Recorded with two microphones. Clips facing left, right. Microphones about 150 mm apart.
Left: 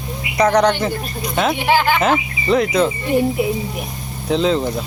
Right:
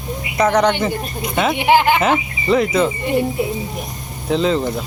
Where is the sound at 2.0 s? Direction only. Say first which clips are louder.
Even; centre (ahead or behind).